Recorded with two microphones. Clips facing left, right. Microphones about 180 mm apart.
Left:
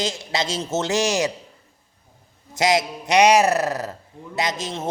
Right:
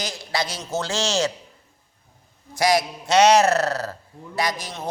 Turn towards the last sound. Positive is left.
turn(degrees=25)  # may be behind; listen again after turning